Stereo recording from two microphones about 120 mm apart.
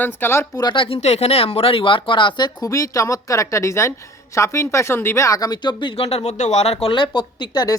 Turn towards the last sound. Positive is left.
turn(degrees=35)  # may be behind; listen again after turning